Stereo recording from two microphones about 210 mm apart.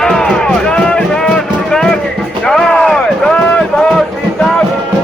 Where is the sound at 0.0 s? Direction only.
Centre (ahead or behind).